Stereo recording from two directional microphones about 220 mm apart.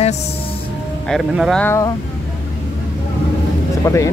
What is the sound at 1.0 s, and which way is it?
Speech, centre (ahead or behind).